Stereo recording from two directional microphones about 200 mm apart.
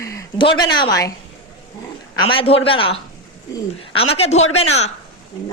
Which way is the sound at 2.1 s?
25° left (ahead or behind).